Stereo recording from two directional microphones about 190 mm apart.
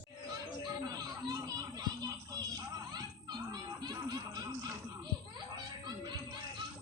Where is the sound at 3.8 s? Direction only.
20° right (ahead or behind).